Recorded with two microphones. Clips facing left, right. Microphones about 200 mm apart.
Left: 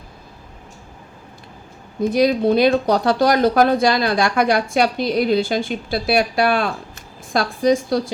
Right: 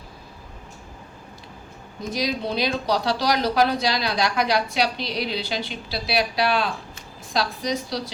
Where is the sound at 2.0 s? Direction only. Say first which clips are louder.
Left 10 dB; 55° left (ahead or behind).